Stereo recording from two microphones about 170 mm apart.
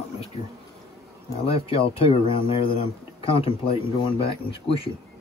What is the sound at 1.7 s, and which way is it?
Speech, 35° left (ahead or behind).